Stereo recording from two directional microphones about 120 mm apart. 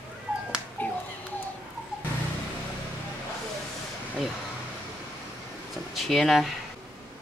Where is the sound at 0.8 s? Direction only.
15° left (ahead or behind).